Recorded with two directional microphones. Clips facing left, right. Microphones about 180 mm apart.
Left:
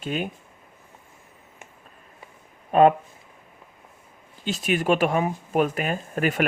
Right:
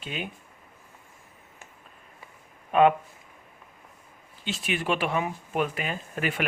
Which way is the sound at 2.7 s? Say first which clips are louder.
Left 3 dB; 40° left (ahead or behind).